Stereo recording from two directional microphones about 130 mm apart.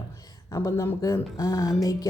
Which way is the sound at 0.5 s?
20° left (ahead or behind).